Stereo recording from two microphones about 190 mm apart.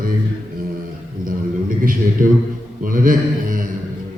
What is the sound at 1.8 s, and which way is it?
A man's voice, 45° right (ahead or behind).